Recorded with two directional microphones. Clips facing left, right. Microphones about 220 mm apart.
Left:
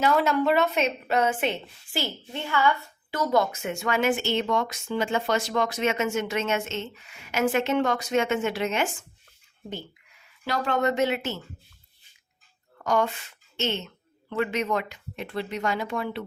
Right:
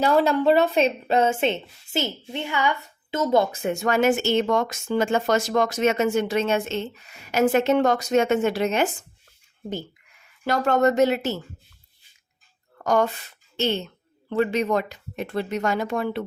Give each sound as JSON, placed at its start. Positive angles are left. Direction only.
{"t": 0.0, "sound": "a woman's voice", "side_deg": -35}
{"t": 10.4, "sound": "speech", "side_deg": -45}
{"t": 12.8, "sound": "speech", "side_deg": -40}